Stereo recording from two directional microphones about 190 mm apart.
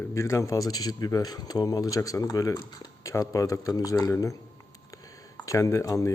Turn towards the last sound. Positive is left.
turn(degrees=15)  # may be behind; listen again after turning